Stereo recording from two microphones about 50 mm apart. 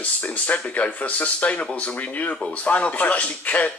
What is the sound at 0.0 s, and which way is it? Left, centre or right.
Speech, left.